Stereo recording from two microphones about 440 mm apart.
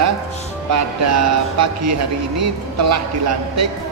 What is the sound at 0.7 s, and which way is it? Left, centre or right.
Speech, right.